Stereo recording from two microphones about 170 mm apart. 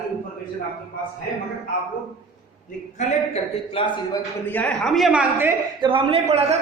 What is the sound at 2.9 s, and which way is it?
A man's voice, 35° left (ahead or behind).